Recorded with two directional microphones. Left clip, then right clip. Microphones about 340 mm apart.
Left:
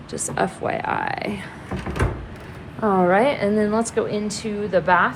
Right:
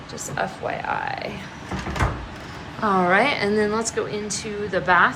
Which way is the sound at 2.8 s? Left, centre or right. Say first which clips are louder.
Left 1 dB; centre.